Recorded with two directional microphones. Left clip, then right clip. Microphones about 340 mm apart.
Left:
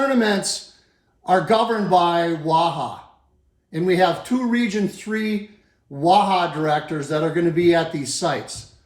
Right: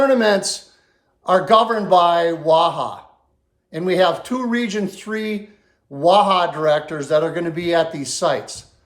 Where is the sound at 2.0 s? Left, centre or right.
Centre.